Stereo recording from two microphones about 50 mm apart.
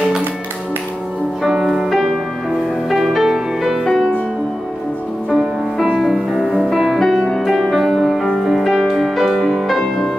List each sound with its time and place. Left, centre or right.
1.4 s music: centre
2.9 s music: centre
3.8 s music: centre
5.3 s music: centre